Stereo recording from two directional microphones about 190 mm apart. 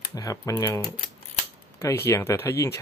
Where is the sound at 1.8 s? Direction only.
15° left (ahead or behind).